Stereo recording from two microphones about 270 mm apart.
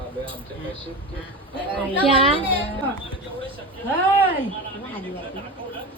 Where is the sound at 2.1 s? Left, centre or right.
Centre.